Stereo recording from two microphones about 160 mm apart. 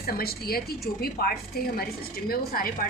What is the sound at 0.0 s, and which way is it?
Speech, 75° left (ahead or behind).